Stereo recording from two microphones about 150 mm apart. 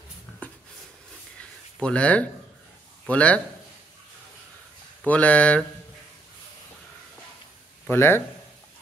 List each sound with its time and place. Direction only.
0.3 s a sound: 15° left (ahead or behind)
1.8 s speech: 5° left (ahead or behind)
5.0 s speech: 10° left (ahead or behind)
7.9 s speech: 15° left (ahead or behind)